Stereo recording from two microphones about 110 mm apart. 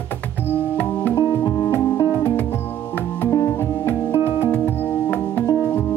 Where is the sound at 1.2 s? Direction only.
30° left (ahead or behind).